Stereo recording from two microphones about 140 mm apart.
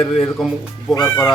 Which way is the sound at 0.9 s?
25° left (ahead or behind).